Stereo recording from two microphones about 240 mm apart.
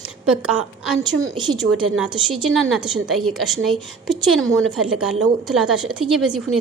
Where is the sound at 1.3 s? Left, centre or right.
Centre.